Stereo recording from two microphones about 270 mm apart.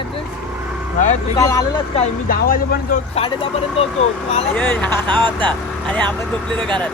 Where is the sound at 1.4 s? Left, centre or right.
Centre.